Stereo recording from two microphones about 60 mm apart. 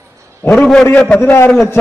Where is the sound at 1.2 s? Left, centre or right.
Left.